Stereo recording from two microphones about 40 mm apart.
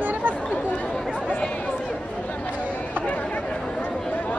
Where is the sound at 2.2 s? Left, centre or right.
Left.